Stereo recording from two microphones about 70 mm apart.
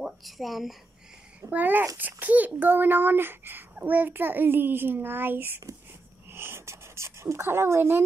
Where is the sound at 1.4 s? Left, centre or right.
Right.